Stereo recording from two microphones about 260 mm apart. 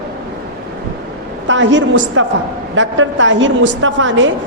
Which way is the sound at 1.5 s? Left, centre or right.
Right.